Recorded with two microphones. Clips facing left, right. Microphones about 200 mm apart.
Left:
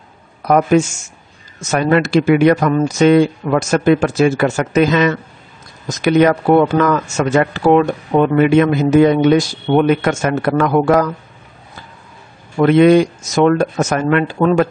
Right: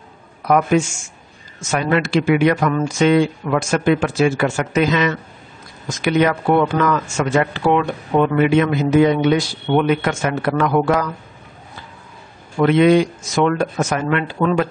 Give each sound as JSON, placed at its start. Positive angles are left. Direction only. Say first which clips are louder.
{"t": 0.5, "sound": "speech", "louder": "left 3 dB", "side_deg": 40}
{"t": 12.5, "sound": "speech", "louder": "left 3 dB", "side_deg": 45}